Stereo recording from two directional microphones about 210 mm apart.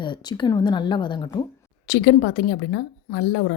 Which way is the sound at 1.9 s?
45° left (ahead or behind).